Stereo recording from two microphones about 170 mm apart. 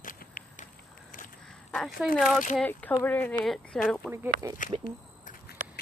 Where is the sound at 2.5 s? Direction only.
10° left (ahead or behind).